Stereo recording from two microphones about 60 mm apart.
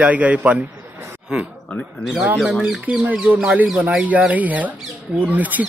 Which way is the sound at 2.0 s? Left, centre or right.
Centre.